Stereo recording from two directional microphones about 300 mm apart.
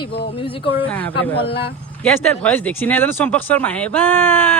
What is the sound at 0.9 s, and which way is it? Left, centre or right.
Speech, centre.